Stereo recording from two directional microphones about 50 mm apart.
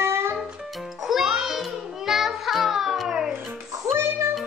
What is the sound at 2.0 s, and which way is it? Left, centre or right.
Child singing, centre.